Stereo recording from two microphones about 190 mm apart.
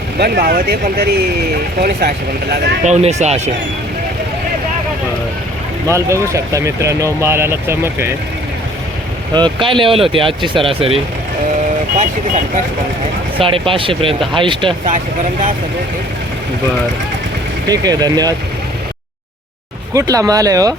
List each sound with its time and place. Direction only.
0.2 s speech: 50° right (ahead or behind)
2.8 s speech: 35° right (ahead or behind)
5.9 s speech: 15° right (ahead or behind)
9.3 s speech: 25° right (ahead or behind)
13.4 s speech: 25° right (ahead or behind)
17.7 s speech: 20° right (ahead or behind)
19.9 s speech: 15° right (ahead or behind)